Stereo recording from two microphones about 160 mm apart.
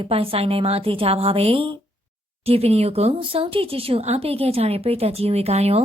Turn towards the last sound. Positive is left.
turn(degrees=-40)  # may be behind; listen again after turning